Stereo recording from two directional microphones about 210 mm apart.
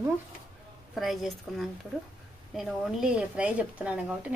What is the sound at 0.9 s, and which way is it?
A woman's voice, centre (ahead or behind).